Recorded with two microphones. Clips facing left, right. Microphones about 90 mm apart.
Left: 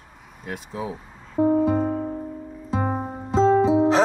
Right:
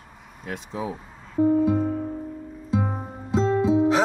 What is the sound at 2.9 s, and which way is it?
Music, 35° left (ahead or behind).